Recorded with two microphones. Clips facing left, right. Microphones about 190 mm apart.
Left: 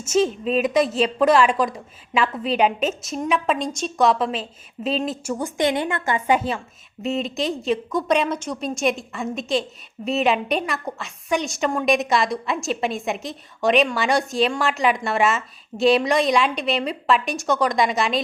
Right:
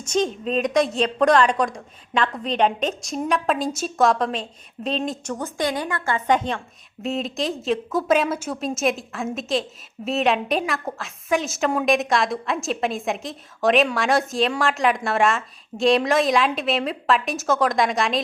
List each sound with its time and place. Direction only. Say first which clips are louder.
0.0 s a woman's voice: left 3 dB; 5° left (ahead or behind)
5.5 s a woman's voice: left 4 dB; 25° left (ahead or behind)
6.1 s a woman's voice: even; 10° left (ahead or behind)